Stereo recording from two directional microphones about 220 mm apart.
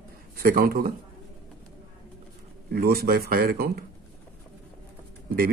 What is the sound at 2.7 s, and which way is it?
Speech, 45° right (ahead or behind).